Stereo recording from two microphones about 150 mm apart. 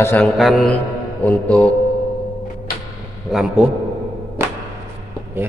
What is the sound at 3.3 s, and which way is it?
Speech, 5° right (ahead or behind).